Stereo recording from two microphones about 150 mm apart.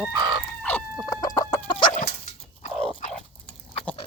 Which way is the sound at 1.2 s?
25° left (ahead or behind).